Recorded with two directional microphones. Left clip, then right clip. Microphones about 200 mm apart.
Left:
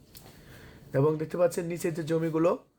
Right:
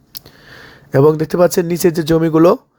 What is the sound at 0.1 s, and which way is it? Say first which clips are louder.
Speech: right 15 dB; 40° right (ahead or behind).